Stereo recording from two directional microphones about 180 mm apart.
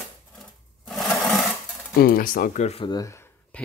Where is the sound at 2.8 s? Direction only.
20° left (ahead or behind).